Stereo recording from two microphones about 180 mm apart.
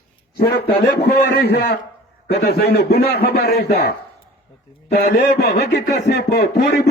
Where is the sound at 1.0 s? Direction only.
60° left (ahead or behind).